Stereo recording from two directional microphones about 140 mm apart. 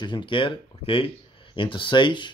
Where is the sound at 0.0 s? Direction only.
35° left (ahead or behind).